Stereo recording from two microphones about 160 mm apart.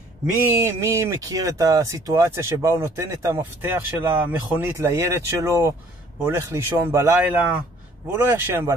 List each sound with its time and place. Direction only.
0.6 s speech: 20° right (ahead or behind)